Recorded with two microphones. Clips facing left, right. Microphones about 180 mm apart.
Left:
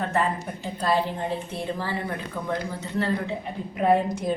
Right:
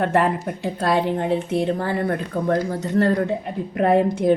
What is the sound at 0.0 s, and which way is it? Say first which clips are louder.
A woman's voice: right 6 dB; 65° right (ahead or behind).